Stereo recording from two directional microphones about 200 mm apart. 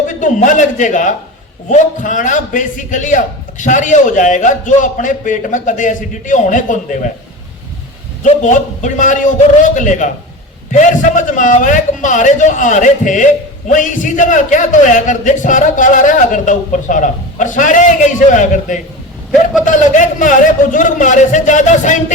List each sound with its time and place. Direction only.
0.1 s a man's voice: 40° left (ahead or behind)
8.2 s a man's voice: 40° left (ahead or behind)